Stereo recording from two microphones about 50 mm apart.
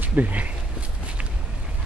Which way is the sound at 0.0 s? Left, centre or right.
Right.